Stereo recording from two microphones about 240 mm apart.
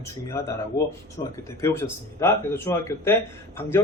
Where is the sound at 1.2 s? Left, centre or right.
Left.